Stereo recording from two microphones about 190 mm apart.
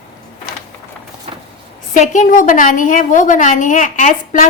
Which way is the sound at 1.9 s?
40° left (ahead or behind).